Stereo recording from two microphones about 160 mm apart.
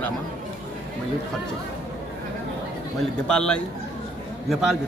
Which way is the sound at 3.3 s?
5° left (ahead or behind).